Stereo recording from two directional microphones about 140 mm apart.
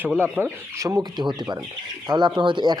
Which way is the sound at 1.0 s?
30° right (ahead or behind).